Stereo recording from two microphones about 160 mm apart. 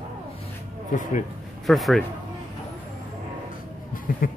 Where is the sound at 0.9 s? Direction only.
50° left (ahead or behind).